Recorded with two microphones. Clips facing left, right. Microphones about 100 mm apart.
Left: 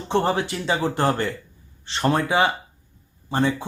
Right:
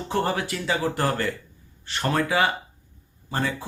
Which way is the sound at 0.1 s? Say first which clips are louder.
Left 4 dB; 25° left (ahead or behind).